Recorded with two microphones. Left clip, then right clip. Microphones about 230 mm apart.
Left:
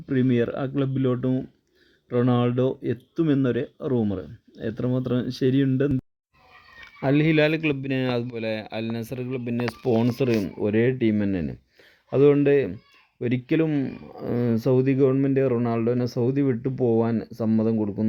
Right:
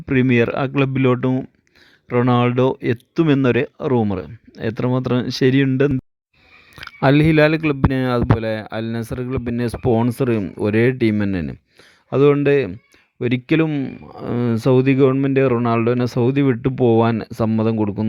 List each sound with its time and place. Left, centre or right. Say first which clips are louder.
0.0 s speech: right 7 dB; right
6.7 s speech: right 7 dB; right
16.4 s speech: right 6 dB; right
17.0 s speech: right 7 dB; right